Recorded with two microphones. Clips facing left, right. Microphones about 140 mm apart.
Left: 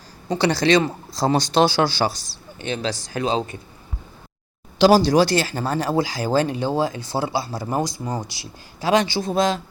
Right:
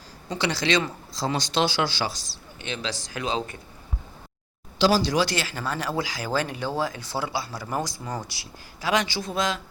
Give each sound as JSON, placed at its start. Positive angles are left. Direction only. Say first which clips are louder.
{"t": 0.3, "sound": "speech", "louder": "left 7 dB", "side_deg": 40}
{"t": 4.8, "sound": "speech", "louder": "left 7 dB", "side_deg": 45}